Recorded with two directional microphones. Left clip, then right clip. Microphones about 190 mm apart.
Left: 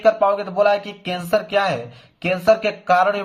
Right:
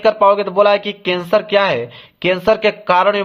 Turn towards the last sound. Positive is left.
turn(degrees=-40)  # may be behind; listen again after turning